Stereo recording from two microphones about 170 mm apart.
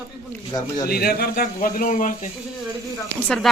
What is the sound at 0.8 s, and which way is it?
A man's voice, 65° left (ahead or behind).